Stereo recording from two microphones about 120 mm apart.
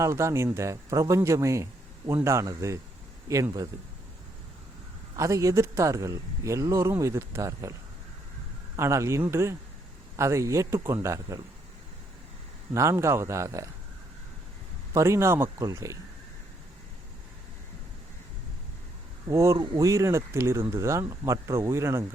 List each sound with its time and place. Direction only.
0.0 s speech: 25° right (ahead or behind)
5.1 s speech: 25° right (ahead or behind)
12.7 s speech: 25° right (ahead or behind)
14.9 s speech: 25° right (ahead or behind)
19.3 s speech: 25° right (ahead or behind)